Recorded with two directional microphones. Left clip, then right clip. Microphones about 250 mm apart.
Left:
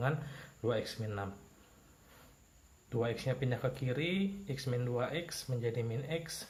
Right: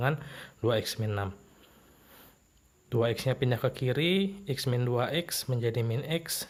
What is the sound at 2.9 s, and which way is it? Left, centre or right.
A man's voice, right.